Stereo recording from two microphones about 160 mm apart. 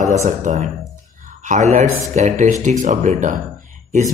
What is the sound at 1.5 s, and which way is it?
Speech, 50° right (ahead or behind).